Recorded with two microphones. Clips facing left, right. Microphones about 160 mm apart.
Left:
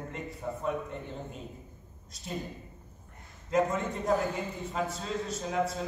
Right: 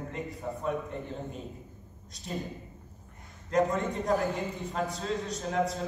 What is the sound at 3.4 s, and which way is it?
A man's voice, centre (ahead or behind).